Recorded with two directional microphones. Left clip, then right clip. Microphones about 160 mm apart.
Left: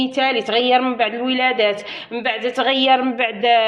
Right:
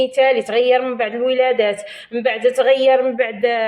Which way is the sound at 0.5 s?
45° left (ahead or behind).